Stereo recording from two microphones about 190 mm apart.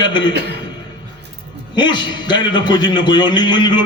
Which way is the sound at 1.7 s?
25° left (ahead or behind).